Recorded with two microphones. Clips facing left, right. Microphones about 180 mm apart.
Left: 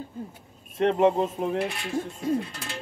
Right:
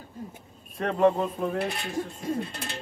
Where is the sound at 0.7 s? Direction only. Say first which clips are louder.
Left 2 dB; 25° left (ahead or behind).